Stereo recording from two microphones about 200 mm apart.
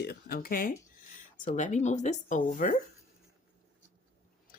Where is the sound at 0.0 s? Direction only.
50° left (ahead or behind).